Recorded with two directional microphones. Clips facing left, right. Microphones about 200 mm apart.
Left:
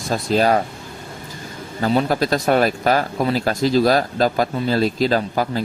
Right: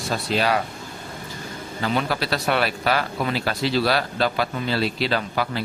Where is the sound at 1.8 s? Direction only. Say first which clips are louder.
Left 6 dB; 40° left (ahead or behind).